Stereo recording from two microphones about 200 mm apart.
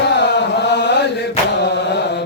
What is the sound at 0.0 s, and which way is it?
Chant, 60° left (ahead or behind).